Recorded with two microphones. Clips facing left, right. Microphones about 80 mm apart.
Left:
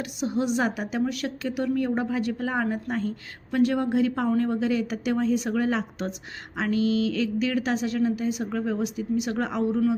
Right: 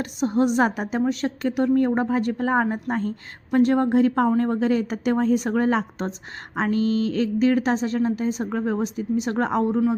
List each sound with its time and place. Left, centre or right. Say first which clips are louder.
0.0 s a woman's voice: right 5 dB; right